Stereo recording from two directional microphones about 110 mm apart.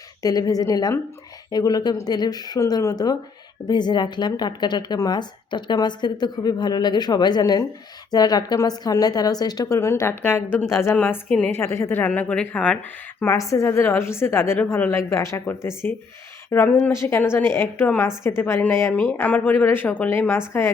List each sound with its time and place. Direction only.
0.2 s a woman's voice: 35° left (ahead or behind)
10.9 s a woman's voice: 10° left (ahead or behind)
11.5 s a woman's voice: 25° left (ahead or behind)
13.3 s a woman's voice: 30° left (ahead or behind)